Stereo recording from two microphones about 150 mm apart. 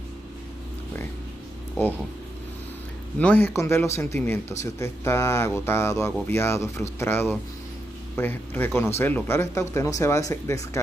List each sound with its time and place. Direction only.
1.8 s speech: 15° left (ahead or behind)
3.2 s speech: 10° left (ahead or behind)